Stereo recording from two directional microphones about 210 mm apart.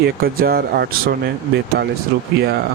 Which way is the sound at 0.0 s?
45° right (ahead or behind).